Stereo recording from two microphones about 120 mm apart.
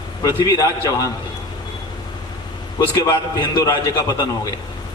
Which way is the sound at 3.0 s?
30° left (ahead or behind).